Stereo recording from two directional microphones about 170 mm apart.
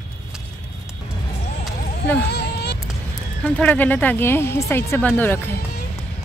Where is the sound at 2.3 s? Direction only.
80° left.